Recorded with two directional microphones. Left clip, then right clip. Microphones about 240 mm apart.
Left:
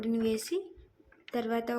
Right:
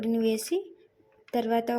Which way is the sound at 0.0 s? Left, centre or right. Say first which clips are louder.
Right 4 dB; centre.